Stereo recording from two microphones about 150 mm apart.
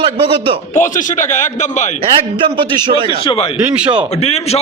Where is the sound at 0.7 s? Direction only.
55° left (ahead or behind).